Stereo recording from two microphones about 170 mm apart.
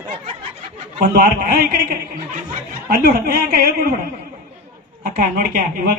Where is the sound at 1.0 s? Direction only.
60° right (ahead or behind).